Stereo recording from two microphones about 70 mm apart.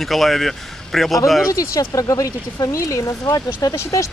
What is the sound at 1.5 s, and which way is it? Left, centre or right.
Speech, left.